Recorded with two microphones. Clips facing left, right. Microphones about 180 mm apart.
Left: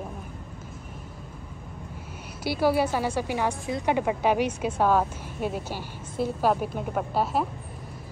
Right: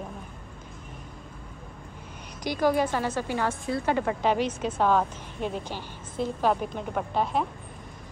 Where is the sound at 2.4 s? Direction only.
5° left (ahead or behind).